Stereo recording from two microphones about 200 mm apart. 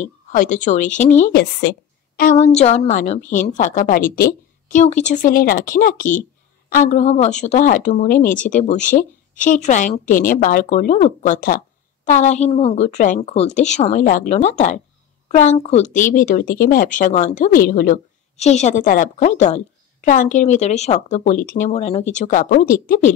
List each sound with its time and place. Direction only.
0.0 s speech: 40° left (ahead or behind)
1.3 s a sound: 60° left (ahead or behind)
2.2 s a woman's voice: 35° left (ahead or behind)